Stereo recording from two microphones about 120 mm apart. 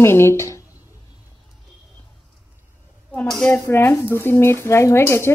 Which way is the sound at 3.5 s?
20° left (ahead or behind).